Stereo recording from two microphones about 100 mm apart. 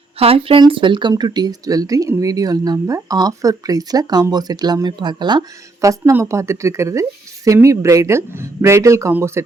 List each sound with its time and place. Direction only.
0.2 s speech: 75° right (ahead or behind)
0.7 s speech: 55° right (ahead or behind)
5.8 s speech: 35° right (ahead or behind)